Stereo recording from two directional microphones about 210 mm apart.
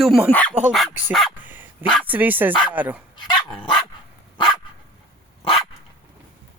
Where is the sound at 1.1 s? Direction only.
5° right (ahead or behind).